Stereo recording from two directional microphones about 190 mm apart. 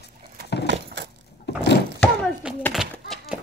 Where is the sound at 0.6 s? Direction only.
65° right (ahead or behind).